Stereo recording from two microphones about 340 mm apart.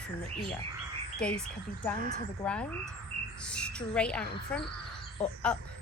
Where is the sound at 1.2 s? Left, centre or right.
Centre.